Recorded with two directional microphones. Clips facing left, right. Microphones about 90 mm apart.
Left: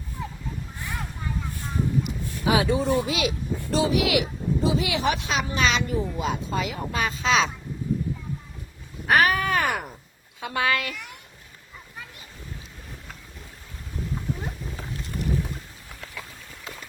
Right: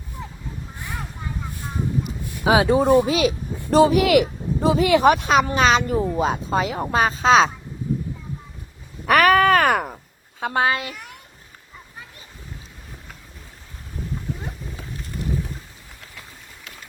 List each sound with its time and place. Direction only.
0.8 s vehicle: 20° right (ahead or behind)
2.5 s speech: 35° right (ahead or behind)
3.7 s a woman's voice: 50° right (ahead or behind)
9.0 s wail: 65° right (ahead or behind); by 10.0 s 50° right (ahead or behind)
10.4 s a woman's voice: 35° right (ahead or behind)